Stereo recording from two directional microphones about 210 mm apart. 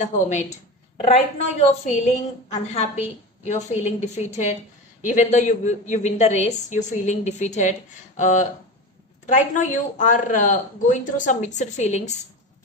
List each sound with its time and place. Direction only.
0.0 s speech: 35° left (ahead or behind)